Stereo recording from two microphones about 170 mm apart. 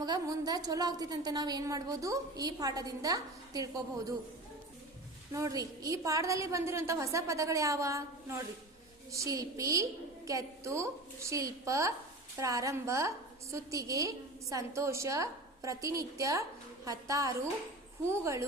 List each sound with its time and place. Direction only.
0.0 s a woman's voice: 25° right (ahead or behind)
5.3 s a woman's voice: 20° right (ahead or behind)